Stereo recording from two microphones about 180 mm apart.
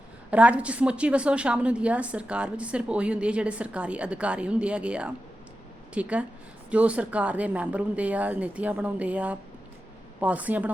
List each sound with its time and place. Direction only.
0.3 s a woman's voice: 5° right (ahead or behind)